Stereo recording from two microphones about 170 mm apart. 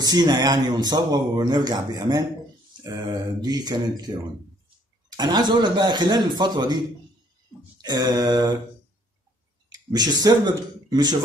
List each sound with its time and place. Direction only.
0.0 s speech: 25° right (ahead or behind)
5.1 s speech: 25° right (ahead or behind)
7.8 s speech: 25° right (ahead or behind)
9.7 s speech: 25° right (ahead or behind)